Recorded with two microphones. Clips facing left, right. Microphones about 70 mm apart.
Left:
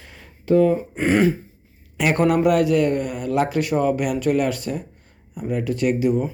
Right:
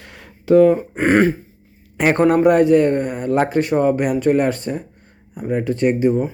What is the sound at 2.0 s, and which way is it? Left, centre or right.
Speech, right.